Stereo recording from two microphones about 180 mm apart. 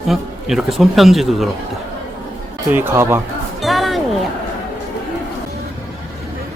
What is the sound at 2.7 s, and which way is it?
Speech, 15° right (ahead or behind).